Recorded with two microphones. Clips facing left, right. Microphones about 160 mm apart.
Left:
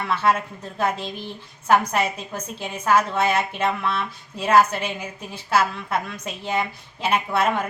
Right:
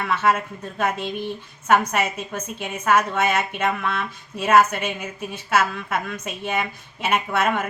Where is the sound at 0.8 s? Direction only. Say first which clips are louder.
Right 1 dB; 30° left (ahead or behind).